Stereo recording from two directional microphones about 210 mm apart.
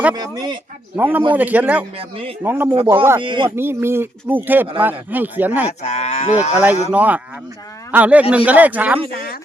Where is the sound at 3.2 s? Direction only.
25° right (ahead or behind).